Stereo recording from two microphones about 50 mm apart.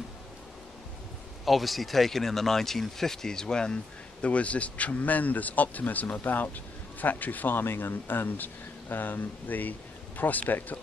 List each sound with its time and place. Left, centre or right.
1.4 s a man's voice: centre; by 10.8 s left